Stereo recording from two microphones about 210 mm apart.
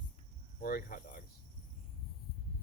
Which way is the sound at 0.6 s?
45° left (ahead or behind).